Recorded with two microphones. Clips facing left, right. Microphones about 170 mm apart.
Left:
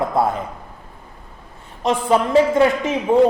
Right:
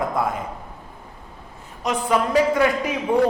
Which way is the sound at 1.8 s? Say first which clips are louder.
Left 4 dB; 25° left (ahead or behind).